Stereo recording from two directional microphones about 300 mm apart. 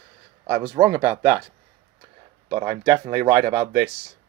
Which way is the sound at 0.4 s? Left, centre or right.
Centre.